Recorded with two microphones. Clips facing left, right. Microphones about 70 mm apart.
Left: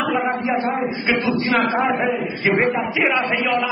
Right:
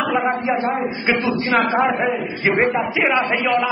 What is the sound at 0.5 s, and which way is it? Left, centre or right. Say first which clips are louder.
Speech: right 1 dB; right.